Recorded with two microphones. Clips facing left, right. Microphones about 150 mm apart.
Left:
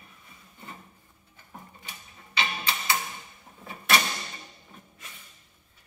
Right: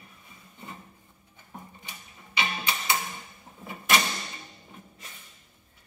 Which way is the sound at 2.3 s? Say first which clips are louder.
Even; 20° right (ahead or behind).